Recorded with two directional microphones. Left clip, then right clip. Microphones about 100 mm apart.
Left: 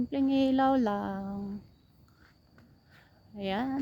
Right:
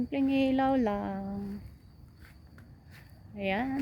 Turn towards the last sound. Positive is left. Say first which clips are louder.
# right 1 dB
turn(degrees=25)  # may be behind; listen again after turning